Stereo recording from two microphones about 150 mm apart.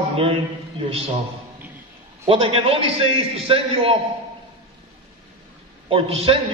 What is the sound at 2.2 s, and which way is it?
A man's voice, 40° right (ahead or behind).